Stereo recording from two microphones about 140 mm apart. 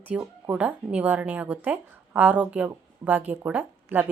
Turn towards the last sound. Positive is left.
turn(degrees=-15)  # may be behind; listen again after turning